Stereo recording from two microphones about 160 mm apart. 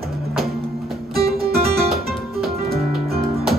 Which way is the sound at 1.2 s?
75° right (ahead or behind).